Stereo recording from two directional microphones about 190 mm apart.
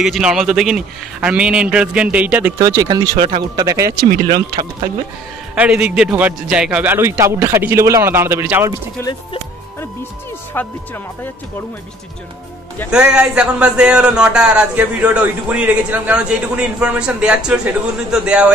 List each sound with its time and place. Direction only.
0.0 s speech: 5° right (ahead or behind)
2.6 s speech: 20° right (ahead or behind)
5.6 s speech: 5° right (ahead or behind)
12.9 s speech: 5° right (ahead or behind)